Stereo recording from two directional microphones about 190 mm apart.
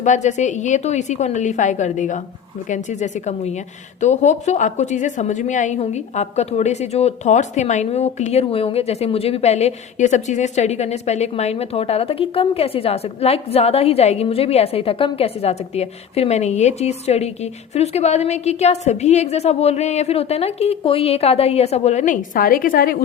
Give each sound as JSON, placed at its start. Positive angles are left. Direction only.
{"t": 0.0, "sound": "a woman's voice", "side_deg": 40}